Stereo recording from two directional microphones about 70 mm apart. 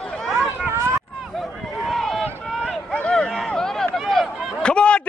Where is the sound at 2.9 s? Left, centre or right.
Centre.